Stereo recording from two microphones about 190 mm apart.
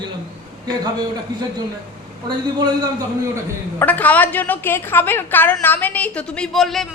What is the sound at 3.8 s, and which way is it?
A woman's voice, 10° left (ahead or behind).